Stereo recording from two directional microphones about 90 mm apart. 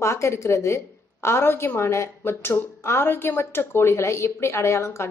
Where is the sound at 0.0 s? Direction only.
30° left (ahead or behind).